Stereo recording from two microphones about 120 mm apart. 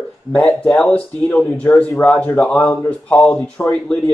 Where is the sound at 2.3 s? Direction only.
5° left (ahead or behind).